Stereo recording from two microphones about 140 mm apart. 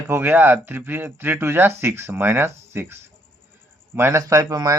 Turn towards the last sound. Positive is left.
turn(degrees=-25)  # may be behind; listen again after turning